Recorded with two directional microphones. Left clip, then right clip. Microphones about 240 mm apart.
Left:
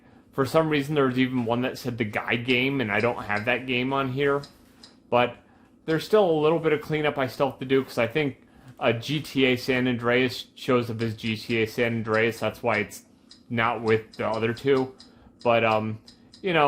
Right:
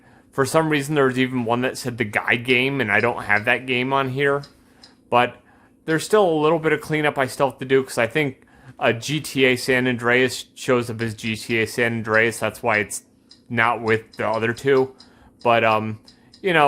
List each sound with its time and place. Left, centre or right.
0.3 s speech: right